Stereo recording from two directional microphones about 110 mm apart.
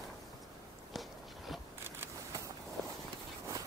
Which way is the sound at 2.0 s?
30° right (ahead or behind).